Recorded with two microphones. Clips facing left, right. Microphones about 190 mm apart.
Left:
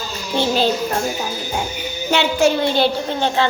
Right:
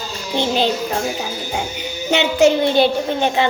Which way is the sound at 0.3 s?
20° right (ahead or behind).